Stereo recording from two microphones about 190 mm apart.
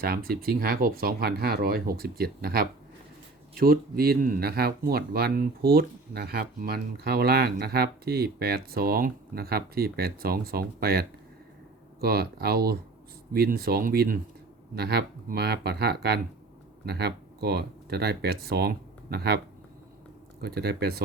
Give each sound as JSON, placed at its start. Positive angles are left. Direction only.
{"t": 0.0, "sound": "speech", "side_deg": -50}
{"t": 20.4, "sound": "speech", "side_deg": -55}